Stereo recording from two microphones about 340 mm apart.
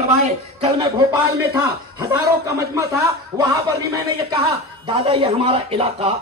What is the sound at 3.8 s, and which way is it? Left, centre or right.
Speech, centre.